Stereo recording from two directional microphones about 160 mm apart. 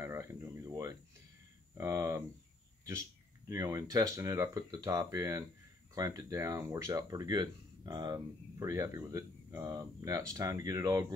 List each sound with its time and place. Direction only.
0.0 s speech: 15° right (ahead or behind)
3.4 s speech: 20° right (ahead or behind)